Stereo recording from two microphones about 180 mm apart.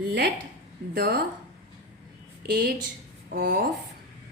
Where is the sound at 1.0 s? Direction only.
60° right (ahead or behind).